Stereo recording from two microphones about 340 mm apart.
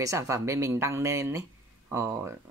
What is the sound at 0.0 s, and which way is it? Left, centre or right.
Speech, centre.